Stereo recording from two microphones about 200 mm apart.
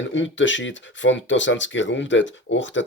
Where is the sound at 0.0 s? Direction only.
70° left (ahead or behind).